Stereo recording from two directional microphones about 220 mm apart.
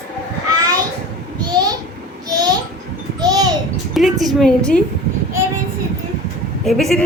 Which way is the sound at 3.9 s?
Centre (ahead or behind).